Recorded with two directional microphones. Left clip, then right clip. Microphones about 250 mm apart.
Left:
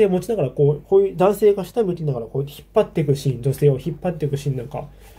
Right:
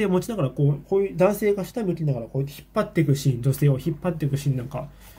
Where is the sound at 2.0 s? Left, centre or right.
Centre.